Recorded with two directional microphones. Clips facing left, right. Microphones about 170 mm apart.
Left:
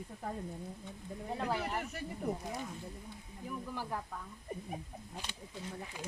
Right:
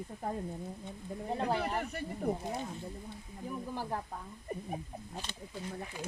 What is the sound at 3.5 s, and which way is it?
Speech, 30° right (ahead or behind).